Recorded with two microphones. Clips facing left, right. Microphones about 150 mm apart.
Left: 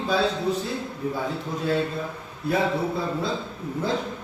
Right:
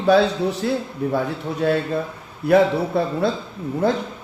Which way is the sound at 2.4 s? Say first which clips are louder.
Right 8 dB; 70° right (ahead or behind).